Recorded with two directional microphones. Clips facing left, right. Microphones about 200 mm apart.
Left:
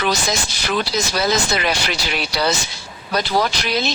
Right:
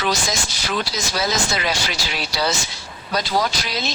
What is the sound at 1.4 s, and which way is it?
Speech, 60° left (ahead or behind).